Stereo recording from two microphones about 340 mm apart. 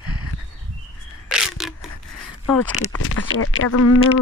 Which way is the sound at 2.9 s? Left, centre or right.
Left.